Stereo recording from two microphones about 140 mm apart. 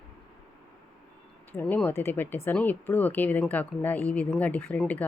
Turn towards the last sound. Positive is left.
turn(degrees=10)  # may be behind; listen again after turning